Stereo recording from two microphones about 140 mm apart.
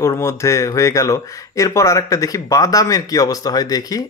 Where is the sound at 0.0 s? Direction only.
20° left (ahead or behind).